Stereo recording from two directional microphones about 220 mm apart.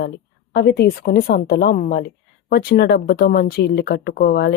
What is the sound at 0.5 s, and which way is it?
Speech, 45° left (ahead or behind).